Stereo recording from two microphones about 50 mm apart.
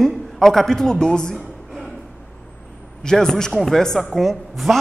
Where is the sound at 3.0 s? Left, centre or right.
Centre.